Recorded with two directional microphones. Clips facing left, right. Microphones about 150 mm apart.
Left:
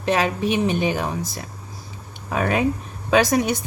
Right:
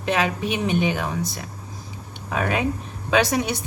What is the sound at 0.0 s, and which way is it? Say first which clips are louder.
A woman's voice: left 2 dB; 40° left (ahead or behind).